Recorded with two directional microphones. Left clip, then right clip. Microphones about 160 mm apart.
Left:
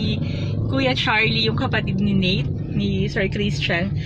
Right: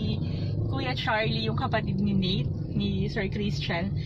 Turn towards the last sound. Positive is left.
turn(degrees=20)  # may be behind; listen again after turning